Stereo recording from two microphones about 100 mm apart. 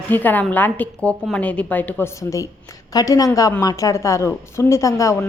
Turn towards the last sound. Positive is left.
turn(degrees=30)  # may be behind; listen again after turning